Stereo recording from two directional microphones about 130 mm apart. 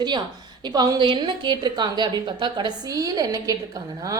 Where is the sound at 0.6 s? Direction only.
30° right (ahead or behind).